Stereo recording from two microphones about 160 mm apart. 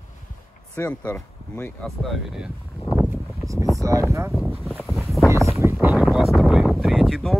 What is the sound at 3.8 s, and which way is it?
Speech, 20° right (ahead or behind).